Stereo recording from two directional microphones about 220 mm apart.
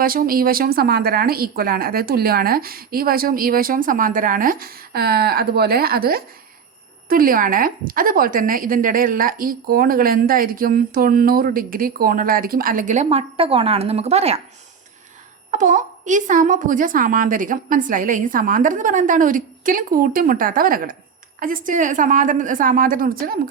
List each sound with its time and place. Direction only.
0.0 s a woman's voice: 40° right (ahead or behind)
15.4 s a woman's voice: 35° right (ahead or behind)